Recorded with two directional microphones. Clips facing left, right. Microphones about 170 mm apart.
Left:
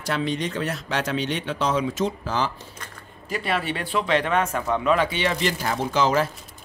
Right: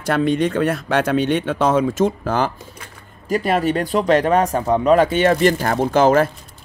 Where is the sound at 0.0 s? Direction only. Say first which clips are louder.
Right 8 dB; 55° right (ahead or behind).